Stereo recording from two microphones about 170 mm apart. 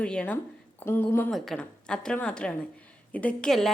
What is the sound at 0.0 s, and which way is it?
A woman's voice, 5° left (ahead or behind).